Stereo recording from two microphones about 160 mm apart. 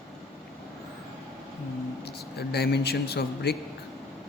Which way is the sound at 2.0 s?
85° left.